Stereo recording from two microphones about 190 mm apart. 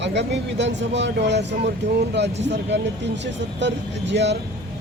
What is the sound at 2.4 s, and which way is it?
Speech, 65° right (ahead or behind).